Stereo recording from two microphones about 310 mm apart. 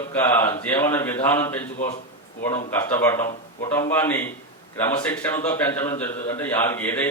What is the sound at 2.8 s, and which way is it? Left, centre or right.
A man's voice, centre.